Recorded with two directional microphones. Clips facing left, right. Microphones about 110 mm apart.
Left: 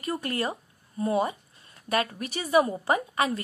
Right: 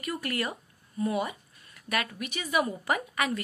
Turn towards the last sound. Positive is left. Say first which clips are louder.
# left 4 dB
turn(degrees=30)  # may be behind; listen again after turning